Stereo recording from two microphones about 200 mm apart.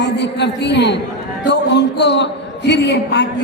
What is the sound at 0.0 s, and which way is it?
A woman's voice, 60° left (ahead or behind).